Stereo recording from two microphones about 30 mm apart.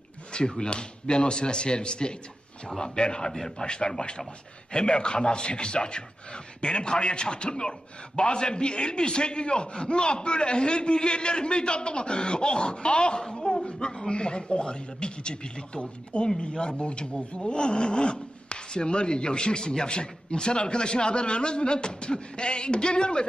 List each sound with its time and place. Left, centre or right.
0.3 s a man's voice: left
13.3 s chuckle: left
13.7 s speech: left